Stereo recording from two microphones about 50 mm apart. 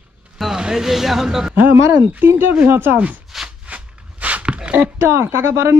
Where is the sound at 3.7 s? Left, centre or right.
Right.